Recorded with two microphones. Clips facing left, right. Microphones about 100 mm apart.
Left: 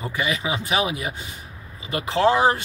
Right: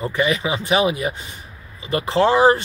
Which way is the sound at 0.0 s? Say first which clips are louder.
Right 5 dB; 5° left (ahead or behind).